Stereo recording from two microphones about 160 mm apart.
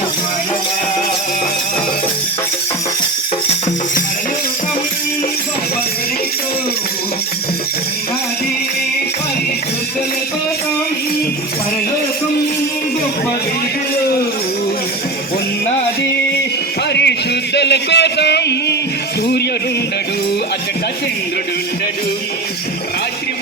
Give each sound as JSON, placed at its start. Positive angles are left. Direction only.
{"t": 16.9, "sound": "music", "side_deg": 90}